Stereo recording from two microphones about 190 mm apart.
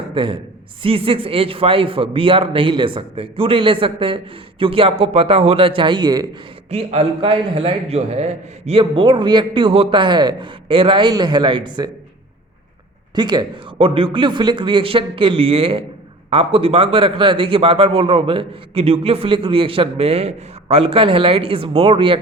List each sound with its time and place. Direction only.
0.1 s a man's voice: 25° right (ahead or behind)
6.7 s a man's voice: 30° right (ahead or behind)
13.1 s a man's voice: 25° right (ahead or behind)